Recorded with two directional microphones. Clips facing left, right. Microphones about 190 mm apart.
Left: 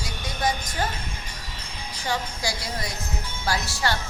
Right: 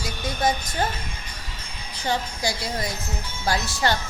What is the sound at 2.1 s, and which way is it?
Speech, 20° right (ahead or behind).